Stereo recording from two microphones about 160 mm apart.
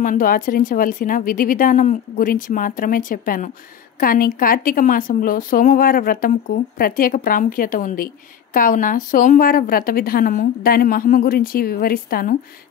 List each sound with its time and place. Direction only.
0.0 s a woman's voice: 60° left (ahead or behind)